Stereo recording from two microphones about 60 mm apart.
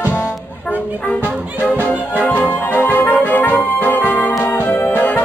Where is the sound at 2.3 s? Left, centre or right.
Left.